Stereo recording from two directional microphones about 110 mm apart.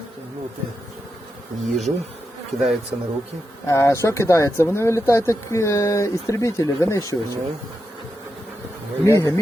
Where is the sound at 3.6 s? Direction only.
25° left (ahead or behind).